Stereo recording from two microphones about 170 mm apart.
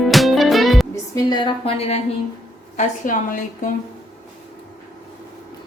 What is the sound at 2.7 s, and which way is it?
A woman's voice, 50° left (ahead or behind).